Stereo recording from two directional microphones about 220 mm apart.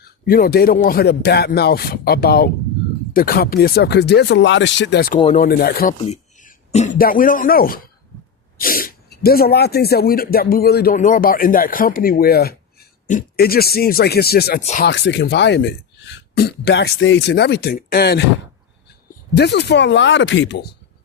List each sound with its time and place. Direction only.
0.0 s speech: 40° left (ahead or behind)
6.1 s speech: 30° left (ahead or behind)
14.6 s speech: 30° left (ahead or behind)
14.8 s speech: 50° left (ahead or behind)
19.4 s speech: 50° left (ahead or behind)